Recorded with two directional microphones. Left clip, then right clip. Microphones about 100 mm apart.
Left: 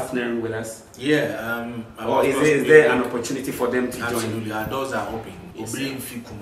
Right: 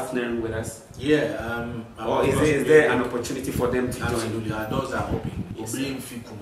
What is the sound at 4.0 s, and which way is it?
A man's voice, 15° left (ahead or behind).